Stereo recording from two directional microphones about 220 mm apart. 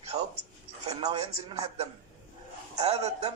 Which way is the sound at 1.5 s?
30° right (ahead or behind).